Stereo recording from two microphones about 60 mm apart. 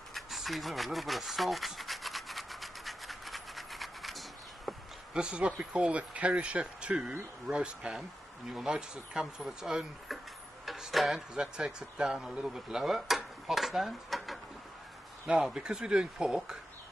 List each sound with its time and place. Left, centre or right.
0.1 s rub: centre
5.1 s speech: centre
8.5 s speech: centre
10.6 s a sound: centre
11.1 s speech: centre
15.4 s speech: centre